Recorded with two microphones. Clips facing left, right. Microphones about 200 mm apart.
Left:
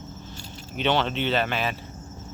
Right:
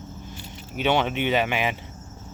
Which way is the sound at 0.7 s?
10° right (ahead or behind).